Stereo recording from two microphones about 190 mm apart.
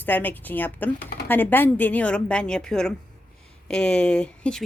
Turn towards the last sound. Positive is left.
turn(degrees=5)  # may be behind; listen again after turning